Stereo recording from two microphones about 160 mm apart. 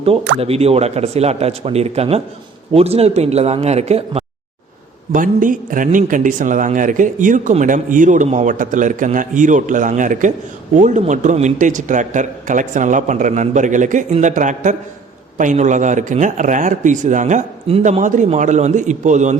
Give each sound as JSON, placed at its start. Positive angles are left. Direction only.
{"t": 0.0, "sound": "a man's voice", "side_deg": -35}
{"t": 5.1, "sound": "a man's voice", "side_deg": -55}